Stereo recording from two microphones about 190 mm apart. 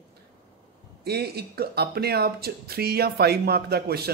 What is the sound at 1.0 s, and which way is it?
A man's voice, 55° right (ahead or behind).